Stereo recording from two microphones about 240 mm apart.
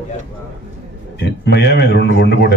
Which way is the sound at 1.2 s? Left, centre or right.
Left.